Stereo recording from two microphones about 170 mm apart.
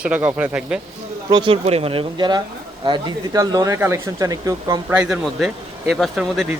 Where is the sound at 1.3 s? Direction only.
30° right (ahead or behind).